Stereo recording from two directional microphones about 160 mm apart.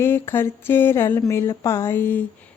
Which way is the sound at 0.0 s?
15° left (ahead or behind).